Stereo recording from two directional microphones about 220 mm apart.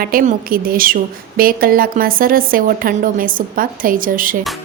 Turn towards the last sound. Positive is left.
turn(degrees=-40)  # may be behind; listen again after turning